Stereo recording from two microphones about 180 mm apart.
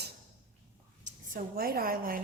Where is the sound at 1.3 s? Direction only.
55° right (ahead or behind).